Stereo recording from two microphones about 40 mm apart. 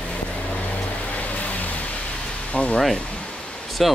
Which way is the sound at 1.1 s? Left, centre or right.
Left.